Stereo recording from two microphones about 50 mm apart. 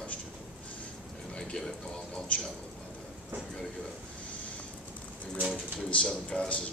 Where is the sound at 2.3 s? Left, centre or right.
Left.